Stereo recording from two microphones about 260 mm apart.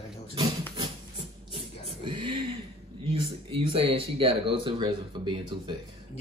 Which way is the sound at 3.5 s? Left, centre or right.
Right.